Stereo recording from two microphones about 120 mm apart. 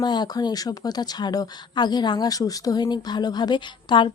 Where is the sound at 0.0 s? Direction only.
35° left (ahead or behind).